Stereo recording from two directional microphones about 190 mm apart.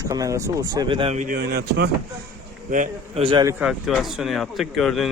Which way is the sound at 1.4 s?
60° right (ahead or behind).